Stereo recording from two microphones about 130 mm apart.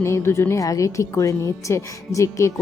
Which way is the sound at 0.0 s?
20° left (ahead or behind).